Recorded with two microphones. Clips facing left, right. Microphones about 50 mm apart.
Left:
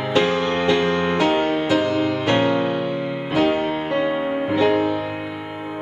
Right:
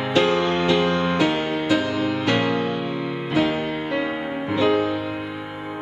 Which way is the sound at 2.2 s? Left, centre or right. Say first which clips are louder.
Left 3 dB; left.